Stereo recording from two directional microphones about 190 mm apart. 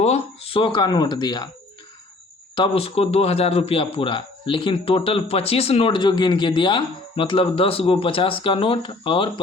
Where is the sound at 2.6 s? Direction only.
30° left (ahead or behind).